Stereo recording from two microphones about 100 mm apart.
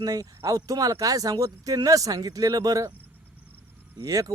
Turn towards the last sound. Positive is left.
turn(degrees=-35)  # may be behind; listen again after turning